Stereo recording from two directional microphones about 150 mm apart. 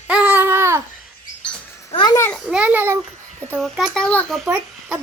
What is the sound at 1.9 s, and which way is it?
Speech, 25° left (ahead or behind).